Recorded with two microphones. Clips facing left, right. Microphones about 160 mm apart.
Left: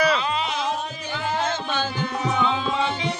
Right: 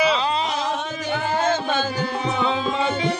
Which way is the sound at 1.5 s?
45° right (ahead or behind).